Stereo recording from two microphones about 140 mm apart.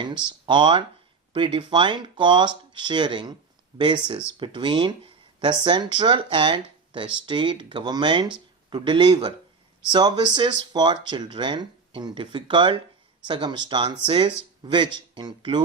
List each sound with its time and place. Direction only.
0.4 s speech: 35° right (ahead or behind)